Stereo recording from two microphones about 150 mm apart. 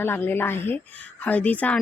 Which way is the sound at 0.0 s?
15° left (ahead or behind).